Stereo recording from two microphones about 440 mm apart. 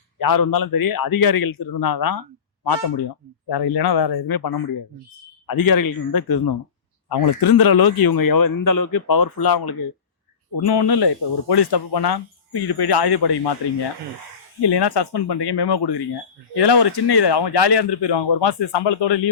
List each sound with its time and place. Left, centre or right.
0.2 s speech: left
14.6 s speech: left